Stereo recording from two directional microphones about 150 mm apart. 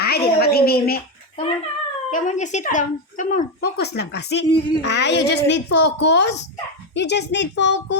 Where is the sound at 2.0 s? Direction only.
55° left (ahead or behind); by 4.3 s 90° left.